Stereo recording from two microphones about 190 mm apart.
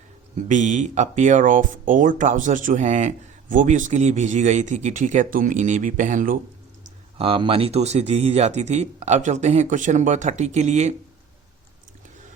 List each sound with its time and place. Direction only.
0.4 s speech: 40° right (ahead or behind)
7.2 s speech: 30° right (ahead or behind)